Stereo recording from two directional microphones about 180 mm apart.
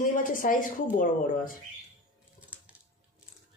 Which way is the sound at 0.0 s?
50° left (ahead or behind).